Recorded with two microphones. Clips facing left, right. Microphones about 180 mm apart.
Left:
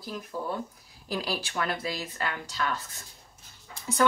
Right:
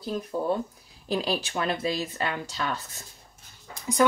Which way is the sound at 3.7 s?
15° right (ahead or behind).